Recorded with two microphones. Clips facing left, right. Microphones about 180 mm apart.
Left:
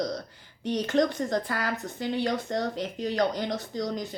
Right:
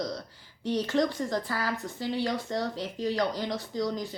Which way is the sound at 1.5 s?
50° left (ahead or behind).